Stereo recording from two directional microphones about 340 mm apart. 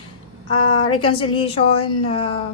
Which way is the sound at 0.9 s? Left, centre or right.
Centre.